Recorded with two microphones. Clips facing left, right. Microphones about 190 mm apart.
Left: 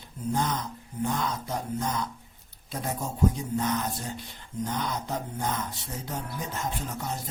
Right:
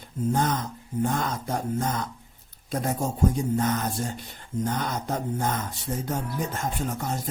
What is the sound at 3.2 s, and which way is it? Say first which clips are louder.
Speech: right 1 dB; 50° right (ahead or behind).